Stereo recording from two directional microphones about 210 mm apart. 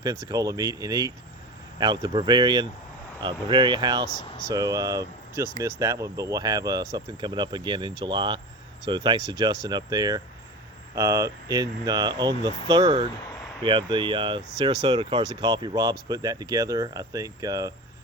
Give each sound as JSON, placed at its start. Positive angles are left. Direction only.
{"t": 0.0, "sound": "speech", "side_deg": -15}